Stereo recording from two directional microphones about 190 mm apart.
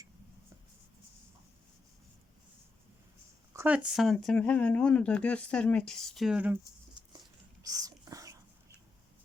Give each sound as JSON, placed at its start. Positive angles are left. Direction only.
{"t": 3.5, "sound": "speech", "side_deg": -10}
{"t": 7.6, "sound": "dog", "side_deg": -20}